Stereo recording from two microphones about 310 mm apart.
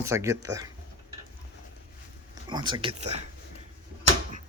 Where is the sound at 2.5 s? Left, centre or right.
Centre.